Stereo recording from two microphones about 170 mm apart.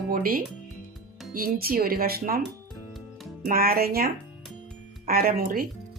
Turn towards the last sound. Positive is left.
turn(degrees=-60)  # may be behind; listen again after turning